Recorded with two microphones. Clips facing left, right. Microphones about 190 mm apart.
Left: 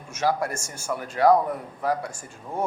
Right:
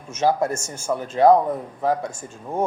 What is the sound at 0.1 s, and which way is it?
A man's voice, 20° right (ahead or behind).